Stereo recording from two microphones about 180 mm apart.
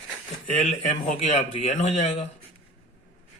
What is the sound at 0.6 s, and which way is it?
Speech, 40° left (ahead or behind).